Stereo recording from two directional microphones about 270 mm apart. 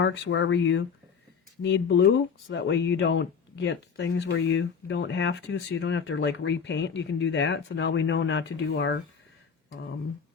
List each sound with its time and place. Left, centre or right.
0.0 s speech: left